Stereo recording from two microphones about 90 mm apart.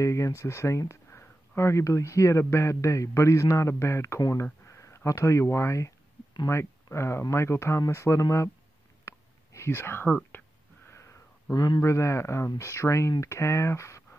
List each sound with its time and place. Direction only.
0.0 s speech: 35° left (ahead or behind)
4.2 s speech: 40° left (ahead or behind)
9.0 s whispering: 30° left (ahead or behind)
10.9 s sniff: 30° left (ahead or behind)
11.5 s speech: 45° left (ahead or behind)
11.8 s speech: 35° left (ahead or behind)